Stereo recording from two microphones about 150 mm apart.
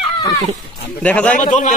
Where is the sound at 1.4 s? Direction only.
55° left (ahead or behind).